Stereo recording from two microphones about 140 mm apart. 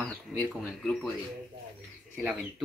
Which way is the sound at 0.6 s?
Centre (ahead or behind).